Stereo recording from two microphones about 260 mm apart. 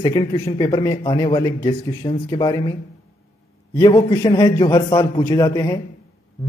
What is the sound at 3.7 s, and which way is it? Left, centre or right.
A man's voice, centre.